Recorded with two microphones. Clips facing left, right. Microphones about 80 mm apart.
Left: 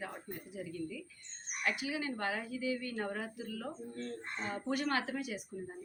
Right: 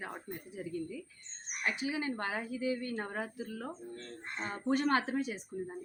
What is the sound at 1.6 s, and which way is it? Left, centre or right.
A woman's voice, right.